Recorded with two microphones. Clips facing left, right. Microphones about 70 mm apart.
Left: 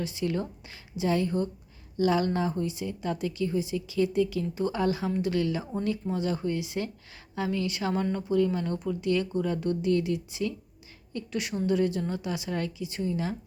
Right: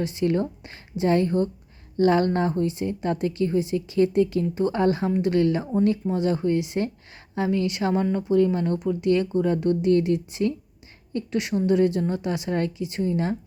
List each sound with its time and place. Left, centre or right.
0.0 s a woman's voice: right